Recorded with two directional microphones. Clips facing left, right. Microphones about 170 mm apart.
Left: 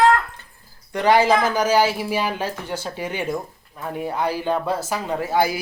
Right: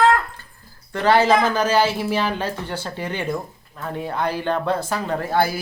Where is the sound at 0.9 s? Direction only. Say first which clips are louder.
Even; 15° left (ahead or behind).